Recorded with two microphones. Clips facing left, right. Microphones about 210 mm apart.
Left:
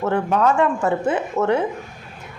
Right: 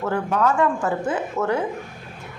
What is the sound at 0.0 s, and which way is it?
A woman's voice, 25° left (ahead or behind).